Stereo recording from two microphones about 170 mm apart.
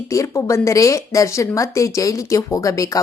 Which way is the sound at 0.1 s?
20° left (ahead or behind).